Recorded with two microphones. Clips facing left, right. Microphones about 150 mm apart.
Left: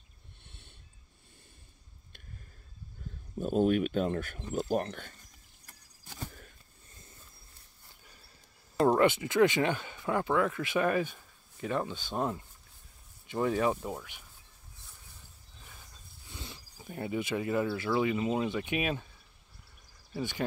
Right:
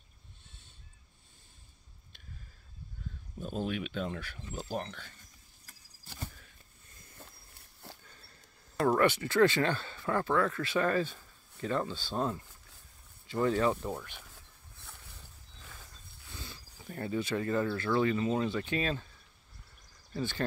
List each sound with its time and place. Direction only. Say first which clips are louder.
0.5 s a sound: left 6 dB; 65° left (ahead or behind)
3.3 s speech: left 9 dB; 50° left (ahead or behind)
7.8 s a sound: right 13 dB; 70° right (ahead or behind)
8.8 s speech: left 2 dB; 20° left (ahead or behind)
16.3 s speech: left 1 dB; 20° left (ahead or behind)
20.2 s speech: even; 15° left (ahead or behind)